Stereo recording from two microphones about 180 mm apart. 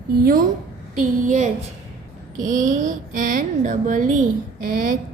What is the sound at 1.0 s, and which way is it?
A child's voice, 45° right (ahead or behind).